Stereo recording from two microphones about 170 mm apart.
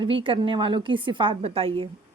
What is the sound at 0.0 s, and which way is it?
A woman's voice, 30° right (ahead or behind).